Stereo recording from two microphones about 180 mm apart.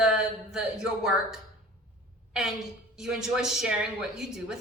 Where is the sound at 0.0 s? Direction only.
5° right (ahead or behind).